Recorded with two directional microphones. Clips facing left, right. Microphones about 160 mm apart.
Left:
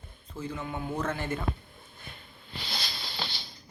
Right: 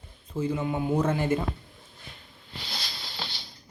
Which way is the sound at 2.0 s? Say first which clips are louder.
Left 2 dB; 55° left (ahead or behind).